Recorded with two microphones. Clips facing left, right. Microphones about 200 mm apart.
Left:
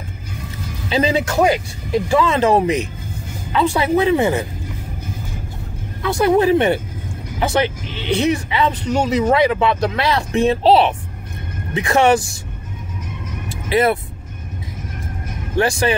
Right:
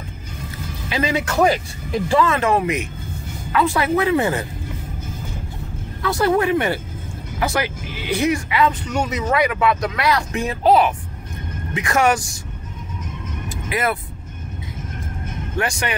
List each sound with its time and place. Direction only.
0.8 s speech: 30° left (ahead or behind)
1.2 s speech: 15° left (ahead or behind)
2.4 s speech: 35° left (ahead or behind)
6.0 s speech: 15° left (ahead or behind)
6.3 s speech: 30° left (ahead or behind)
13.7 s speech: 30° left (ahead or behind)
15.6 s speech: 30° left (ahead or behind)